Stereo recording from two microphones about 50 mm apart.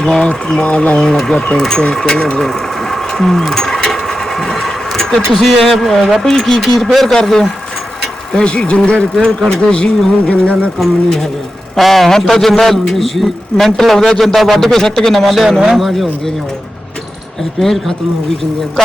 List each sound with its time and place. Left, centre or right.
0.0 s speech: centre
3.5 s sewing machine: centre
5.3 s a man's voice: centre; by 10.7 s left
10.8 s a man's voice: centre
17.6 s a man's voice: centre